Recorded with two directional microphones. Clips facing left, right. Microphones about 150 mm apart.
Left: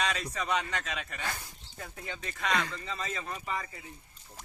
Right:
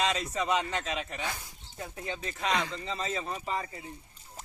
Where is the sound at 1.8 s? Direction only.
25° right (ahead or behind).